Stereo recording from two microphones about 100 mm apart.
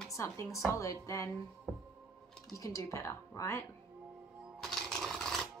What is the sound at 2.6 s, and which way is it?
A woman's voice, 30° left (ahead or behind).